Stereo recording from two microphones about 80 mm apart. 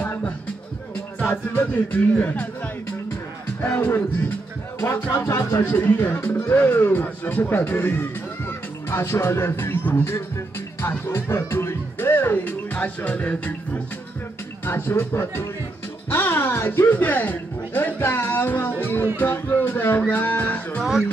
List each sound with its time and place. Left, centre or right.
0.0 s music: left
1.3 s speech: left
3.6 s speech: left
5.7 s speech: left
10.8 s music: left; by 13.4 s centre
14.6 s speech: left
16.1 s music: left
19.1 s speech: left